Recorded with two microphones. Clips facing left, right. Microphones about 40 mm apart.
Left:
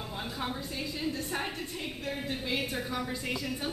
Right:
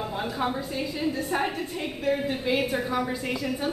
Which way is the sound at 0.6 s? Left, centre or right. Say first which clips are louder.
Right 6 dB; centre.